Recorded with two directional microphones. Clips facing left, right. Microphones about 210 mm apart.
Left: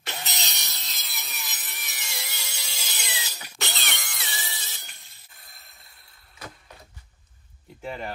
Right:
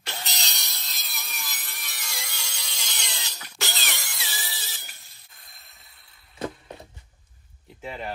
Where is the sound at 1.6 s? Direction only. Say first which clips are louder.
Even; 5° left (ahead or behind).